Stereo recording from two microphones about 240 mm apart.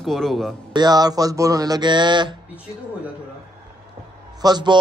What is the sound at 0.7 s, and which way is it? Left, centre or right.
Speech, centre.